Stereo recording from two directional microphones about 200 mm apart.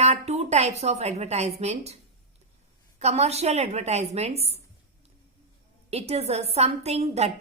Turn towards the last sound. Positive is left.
turn(degrees=-30)  # may be behind; listen again after turning